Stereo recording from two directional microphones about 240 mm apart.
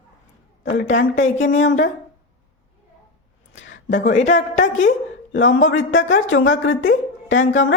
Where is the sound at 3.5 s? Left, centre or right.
Left.